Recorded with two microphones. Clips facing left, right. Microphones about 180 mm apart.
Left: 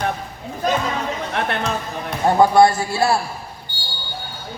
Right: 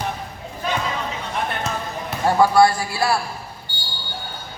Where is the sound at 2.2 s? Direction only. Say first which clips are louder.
Left 2 dB; 20° left (ahead or behind).